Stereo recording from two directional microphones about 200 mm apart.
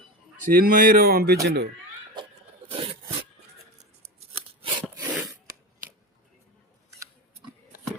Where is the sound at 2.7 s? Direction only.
30° right (ahead or behind).